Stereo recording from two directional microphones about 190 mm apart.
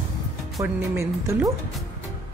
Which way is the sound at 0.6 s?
15° right (ahead or behind).